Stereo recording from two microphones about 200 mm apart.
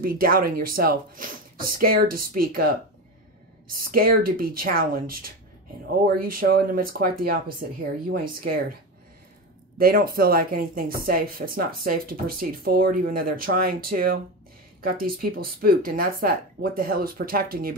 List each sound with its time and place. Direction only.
0.0 s speech: 45° right (ahead or behind)
9.8 s speech: 45° right (ahead or behind)